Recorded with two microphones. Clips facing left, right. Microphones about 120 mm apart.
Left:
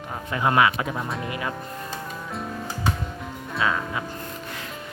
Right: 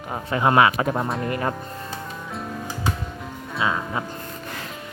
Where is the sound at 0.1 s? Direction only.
30° right (ahead or behind).